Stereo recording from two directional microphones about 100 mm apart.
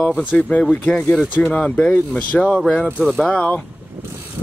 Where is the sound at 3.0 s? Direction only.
Centre (ahead or behind).